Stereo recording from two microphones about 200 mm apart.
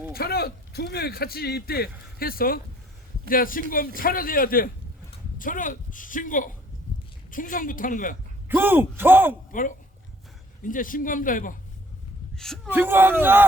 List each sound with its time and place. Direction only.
0.1 s a man's voice: 50° left (ahead or behind)
8.4 s speech: 10° right (ahead or behind)
9.5 s speech: 40° left (ahead or behind)
12.6 s speech: 10° right (ahead or behind)